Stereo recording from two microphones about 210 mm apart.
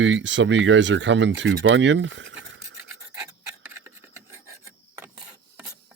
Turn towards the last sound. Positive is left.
turn(degrees=-5)  # may be behind; listen again after turning